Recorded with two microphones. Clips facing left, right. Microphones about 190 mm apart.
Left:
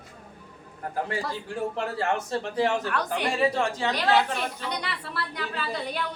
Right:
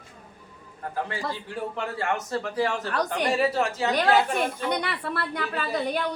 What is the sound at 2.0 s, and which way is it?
Speech, 25° left (ahead or behind).